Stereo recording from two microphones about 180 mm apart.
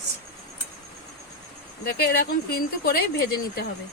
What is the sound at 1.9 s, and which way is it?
Speech, 55° left (ahead or behind).